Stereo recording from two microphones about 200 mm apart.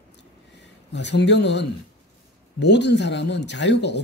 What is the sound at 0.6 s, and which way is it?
Speech, 60° left (ahead or behind).